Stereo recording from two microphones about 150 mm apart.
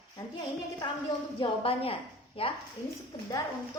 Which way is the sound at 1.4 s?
40° left (ahead or behind).